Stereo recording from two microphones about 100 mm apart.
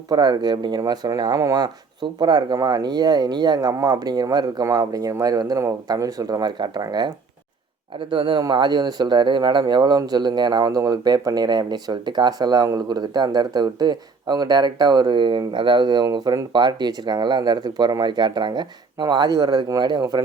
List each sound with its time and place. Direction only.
0.1 s speech: 45° right (ahead or behind)
7.9 s speech: 60° right (ahead or behind); by 20.2 s 40° right (ahead or behind)